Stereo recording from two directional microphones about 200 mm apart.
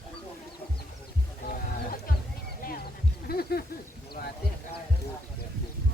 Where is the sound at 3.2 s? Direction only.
50° left (ahead or behind).